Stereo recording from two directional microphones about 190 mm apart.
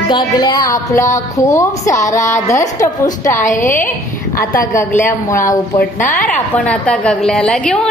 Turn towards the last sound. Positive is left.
turn(degrees=5)  # may be behind; listen again after turning